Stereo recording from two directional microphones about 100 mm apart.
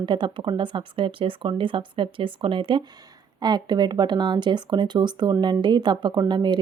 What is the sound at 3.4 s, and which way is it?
Speech, 45° right (ahead or behind).